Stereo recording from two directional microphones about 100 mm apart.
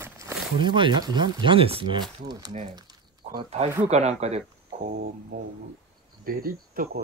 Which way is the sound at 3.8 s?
90° right.